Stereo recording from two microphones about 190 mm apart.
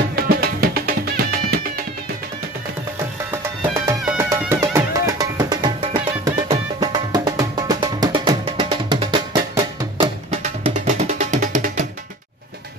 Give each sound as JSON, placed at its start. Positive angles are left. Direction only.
{"t": 0.1, "sound": "music", "side_deg": -50}
{"t": 3.3, "sound": "music", "side_deg": -15}
{"t": 10.4, "sound": "music", "side_deg": -35}